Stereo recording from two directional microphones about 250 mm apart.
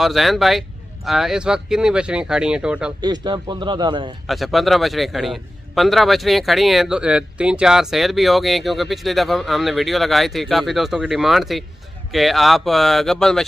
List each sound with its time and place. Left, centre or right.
0.0 s a man's voice: centre
3.0 s a man's voice: centre
4.3 s a man's voice: centre